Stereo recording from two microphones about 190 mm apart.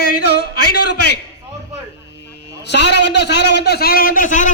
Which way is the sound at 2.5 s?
65° left (ahead or behind).